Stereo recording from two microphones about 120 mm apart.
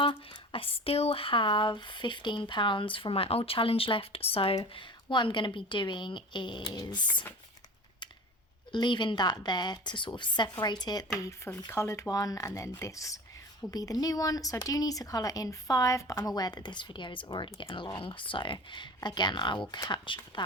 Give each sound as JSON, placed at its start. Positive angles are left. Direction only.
{"t": 0.0, "sound": "speech", "side_deg": 45}
{"t": 8.7, "sound": "speech", "side_deg": 40}
{"t": 11.3, "sound": "speech", "side_deg": 20}